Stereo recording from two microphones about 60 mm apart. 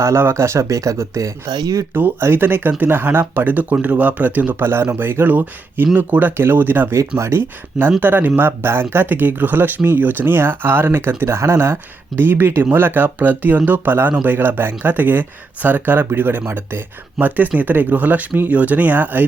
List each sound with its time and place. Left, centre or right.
0.0 s speech: right
1.9 s speech: right
4.6 s speech: right
7.2 s speech: right
7.8 s speech: right
11.2 s speech: right
12.1 s speech: right